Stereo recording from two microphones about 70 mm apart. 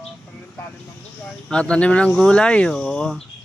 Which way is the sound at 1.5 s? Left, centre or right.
Centre.